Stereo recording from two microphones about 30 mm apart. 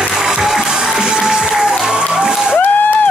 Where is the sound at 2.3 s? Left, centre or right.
Right.